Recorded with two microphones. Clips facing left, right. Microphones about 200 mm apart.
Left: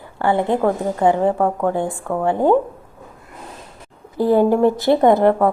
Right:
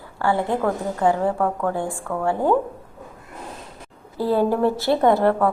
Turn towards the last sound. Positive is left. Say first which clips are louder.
# left 4 dB
turn(degrees=15)  # may be behind; listen again after turning